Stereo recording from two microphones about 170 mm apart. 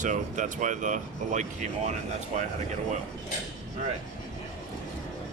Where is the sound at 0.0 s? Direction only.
50° right (ahead or behind).